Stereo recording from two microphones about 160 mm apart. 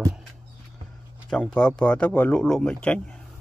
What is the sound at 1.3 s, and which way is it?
Speech, 5° left (ahead or behind).